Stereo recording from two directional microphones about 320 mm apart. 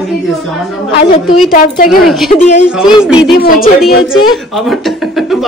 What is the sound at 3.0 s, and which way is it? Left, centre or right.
Speech, centre.